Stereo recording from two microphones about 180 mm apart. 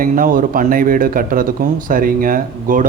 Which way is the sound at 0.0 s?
50° right (ahead or behind).